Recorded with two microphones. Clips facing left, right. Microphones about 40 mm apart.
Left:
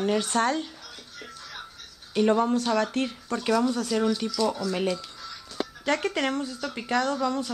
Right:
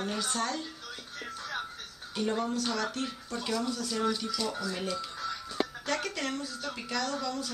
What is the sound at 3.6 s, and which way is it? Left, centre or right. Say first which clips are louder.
Speech: left 8 dB; left.